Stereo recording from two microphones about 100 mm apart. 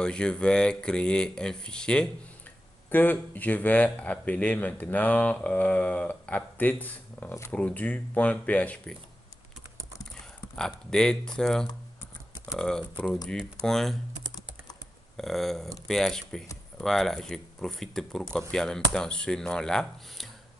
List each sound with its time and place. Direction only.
0.0 s a man's voice: 10° left (ahead or behind)
10.5 s a man's voice: 5° left (ahead or behind)
15.1 s a man's voice: centre (ahead or behind)